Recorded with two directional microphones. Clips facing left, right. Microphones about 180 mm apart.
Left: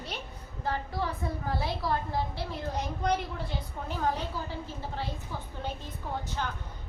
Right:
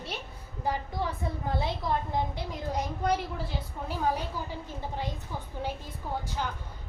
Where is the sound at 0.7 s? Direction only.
15° right (ahead or behind).